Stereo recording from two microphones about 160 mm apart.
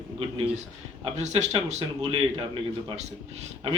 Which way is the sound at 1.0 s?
45° right (ahead or behind).